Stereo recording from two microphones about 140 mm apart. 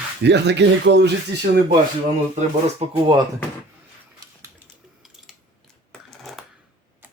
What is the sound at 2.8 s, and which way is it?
Speech, 45° right (ahead or behind).